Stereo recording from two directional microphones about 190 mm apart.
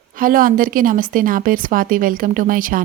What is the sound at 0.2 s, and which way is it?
A woman's voice, 50° right (ahead or behind).